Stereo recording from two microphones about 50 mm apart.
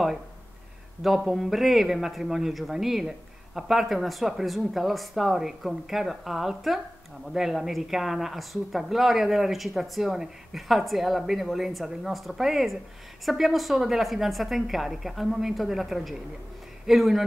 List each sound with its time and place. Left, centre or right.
1.0 s speech: centre